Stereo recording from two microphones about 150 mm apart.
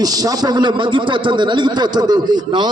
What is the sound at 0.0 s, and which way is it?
A man's voice, 25° right (ahead or behind).